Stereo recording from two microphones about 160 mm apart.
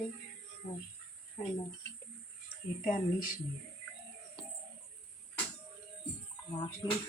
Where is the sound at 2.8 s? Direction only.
60° left (ahead or behind).